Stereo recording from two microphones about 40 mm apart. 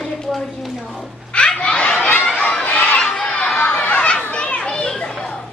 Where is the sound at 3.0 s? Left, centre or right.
Centre.